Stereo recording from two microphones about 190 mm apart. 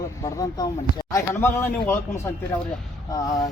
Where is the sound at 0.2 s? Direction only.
20° left (ahead or behind).